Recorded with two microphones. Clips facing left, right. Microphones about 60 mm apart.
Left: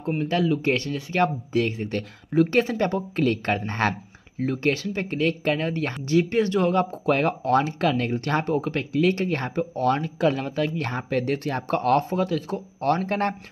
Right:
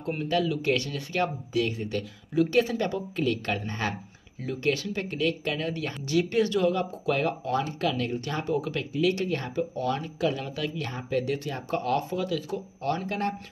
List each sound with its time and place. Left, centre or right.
0.2 s speech: left
7.8 s speech: left
8.1 s speech: left